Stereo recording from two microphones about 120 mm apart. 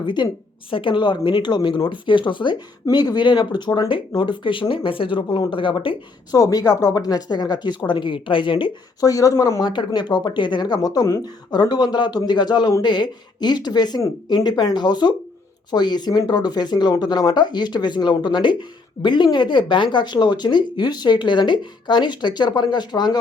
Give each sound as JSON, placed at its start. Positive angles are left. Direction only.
{"t": 0.0, "sound": "a woman's voice", "side_deg": 40}
{"t": 6.3, "sound": "speech", "side_deg": 30}
{"t": 9.0, "sound": "speech", "side_deg": 30}